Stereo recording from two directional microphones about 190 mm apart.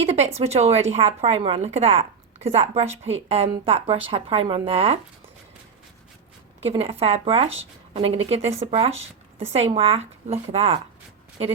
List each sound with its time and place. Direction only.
0.3 s a woman's voice: 35° right (ahead or behind)
6.7 s a woman's voice: 30° right (ahead or behind)